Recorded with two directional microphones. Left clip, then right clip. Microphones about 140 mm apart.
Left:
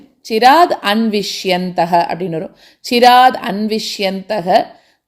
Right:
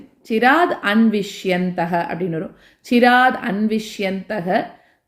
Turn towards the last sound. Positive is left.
turn(degrees=40)  # may be behind; listen again after turning